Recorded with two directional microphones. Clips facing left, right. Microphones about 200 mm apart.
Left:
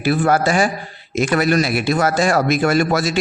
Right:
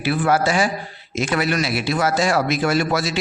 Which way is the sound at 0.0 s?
50° left (ahead or behind).